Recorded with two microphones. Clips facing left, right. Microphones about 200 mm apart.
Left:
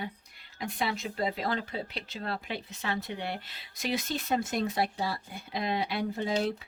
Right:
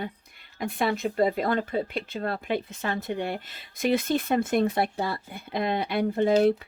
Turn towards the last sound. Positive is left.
turn(degrees=-55)  # may be behind; listen again after turning